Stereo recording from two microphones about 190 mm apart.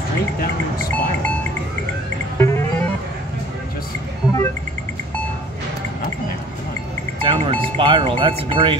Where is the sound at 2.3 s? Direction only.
15° left (ahead or behind).